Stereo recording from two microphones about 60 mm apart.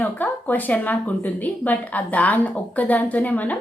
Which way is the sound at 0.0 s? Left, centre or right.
Left.